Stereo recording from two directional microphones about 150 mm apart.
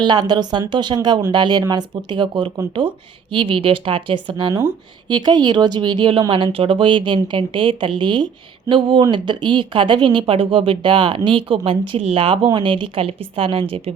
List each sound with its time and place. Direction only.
0.0 s speech: 30° right (ahead or behind)